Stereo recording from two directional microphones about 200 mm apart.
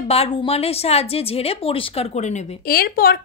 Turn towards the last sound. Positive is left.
turn(degrees=50)  # may be behind; listen again after turning